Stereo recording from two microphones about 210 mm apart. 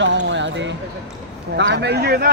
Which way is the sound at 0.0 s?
60° right (ahead or behind).